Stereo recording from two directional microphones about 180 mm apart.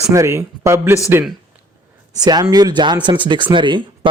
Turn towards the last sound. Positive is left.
turn(degrees=-25)  # may be behind; listen again after turning